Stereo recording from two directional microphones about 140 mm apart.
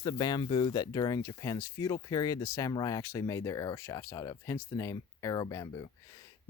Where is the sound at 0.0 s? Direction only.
30° left (ahead or behind).